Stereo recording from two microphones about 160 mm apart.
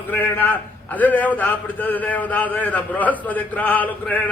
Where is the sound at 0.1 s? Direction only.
10° left (ahead or behind).